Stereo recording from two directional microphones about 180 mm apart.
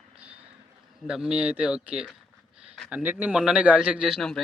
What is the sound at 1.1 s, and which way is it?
A man's voice, 5° right (ahead or behind).